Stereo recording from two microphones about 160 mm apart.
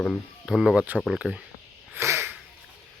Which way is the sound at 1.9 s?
15° right (ahead or behind).